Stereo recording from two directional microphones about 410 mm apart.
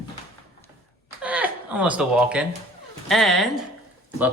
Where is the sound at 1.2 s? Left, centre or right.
Centre.